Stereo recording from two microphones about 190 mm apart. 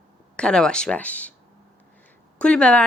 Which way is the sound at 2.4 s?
5° left (ahead or behind).